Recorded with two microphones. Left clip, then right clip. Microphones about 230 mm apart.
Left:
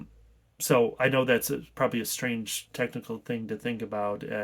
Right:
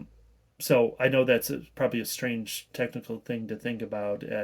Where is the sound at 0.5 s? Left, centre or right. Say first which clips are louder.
Even; centre.